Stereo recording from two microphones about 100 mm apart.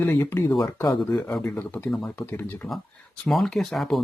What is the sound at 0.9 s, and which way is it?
Speech, 5° left (ahead or behind).